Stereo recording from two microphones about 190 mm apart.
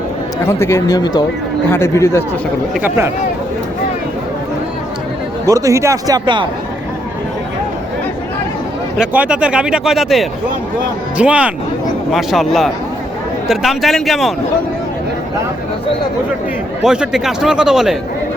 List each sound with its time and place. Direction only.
0.4 s speech: 15° left (ahead or behind)
5.5 s speech: 15° right (ahead or behind)
9.0 s speech: 5° right (ahead or behind)
16.8 s speech: 5° right (ahead or behind)